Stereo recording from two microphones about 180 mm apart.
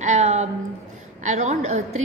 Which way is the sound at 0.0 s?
40° right (ahead or behind).